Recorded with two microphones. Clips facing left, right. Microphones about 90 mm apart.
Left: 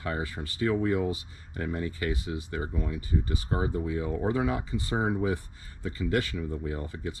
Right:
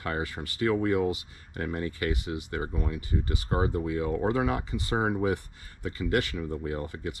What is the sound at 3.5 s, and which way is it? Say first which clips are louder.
Speech: right 3 dB; 35° right (ahead or behind).